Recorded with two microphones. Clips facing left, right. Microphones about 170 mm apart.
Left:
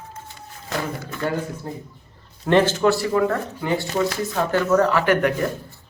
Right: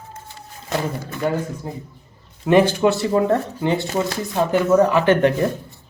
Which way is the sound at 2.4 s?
10° right (ahead or behind).